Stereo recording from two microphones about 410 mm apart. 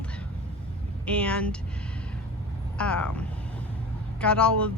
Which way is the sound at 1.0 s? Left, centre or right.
Centre.